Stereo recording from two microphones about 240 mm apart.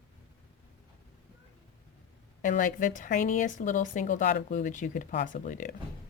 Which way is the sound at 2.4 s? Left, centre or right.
Left.